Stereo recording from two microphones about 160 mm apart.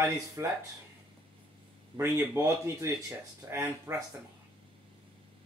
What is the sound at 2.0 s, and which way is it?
Speech, 20° right (ahead or behind).